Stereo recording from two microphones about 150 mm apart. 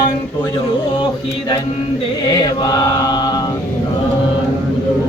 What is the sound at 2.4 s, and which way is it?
Mantra, 25° left (ahead or behind).